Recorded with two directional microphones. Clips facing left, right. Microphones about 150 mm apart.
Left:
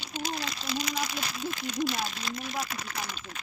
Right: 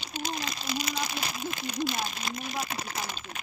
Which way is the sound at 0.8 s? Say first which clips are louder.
Left 1 dB; 30° right (ahead or behind).